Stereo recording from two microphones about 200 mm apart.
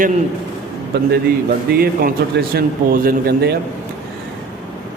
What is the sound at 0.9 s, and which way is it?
A man's voice, 55° right (ahead or behind).